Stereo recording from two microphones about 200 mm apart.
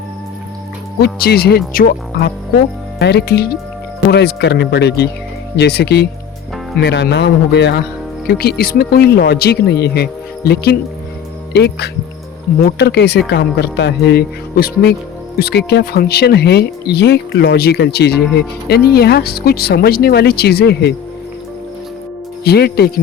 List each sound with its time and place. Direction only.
1.0 s speech: 50° left (ahead or behind)
22.4 s speech: 55° left (ahead or behind)